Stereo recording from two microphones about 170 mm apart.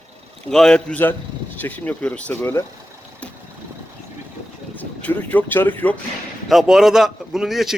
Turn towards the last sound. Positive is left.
turn(degrees=0)  # may be behind; listen again after turning